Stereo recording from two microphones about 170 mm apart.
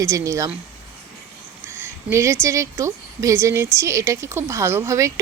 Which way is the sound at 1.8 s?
15° right (ahead or behind).